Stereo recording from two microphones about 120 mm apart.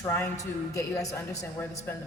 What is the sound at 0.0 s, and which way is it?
A woman's voice, 20° left (ahead or behind).